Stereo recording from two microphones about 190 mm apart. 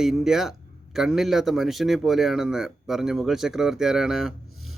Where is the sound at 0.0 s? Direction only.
Centre (ahead or behind).